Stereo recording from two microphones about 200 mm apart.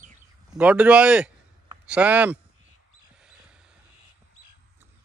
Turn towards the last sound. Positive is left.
turn(degrees=-5)  # may be behind; listen again after turning